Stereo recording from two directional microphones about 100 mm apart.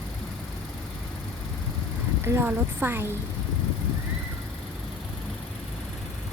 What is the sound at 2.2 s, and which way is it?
Speech, 20° right (ahead or behind).